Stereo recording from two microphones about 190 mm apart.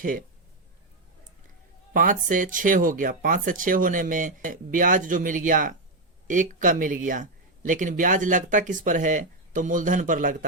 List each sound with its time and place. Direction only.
0.0 s speech: 45° right (ahead or behind)
1.9 s speech: 45° right (ahead or behind)